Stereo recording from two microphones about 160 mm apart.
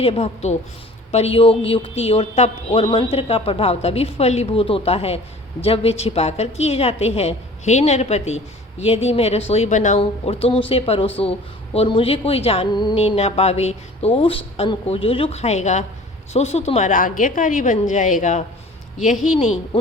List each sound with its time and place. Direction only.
0.0 s a woman's voice: 40° left (ahead or behind)
10.0 s a woman's voice: 35° left (ahead or behind)